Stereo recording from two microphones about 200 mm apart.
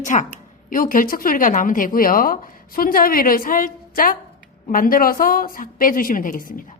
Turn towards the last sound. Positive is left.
turn(degrees=45)  # may be behind; listen again after turning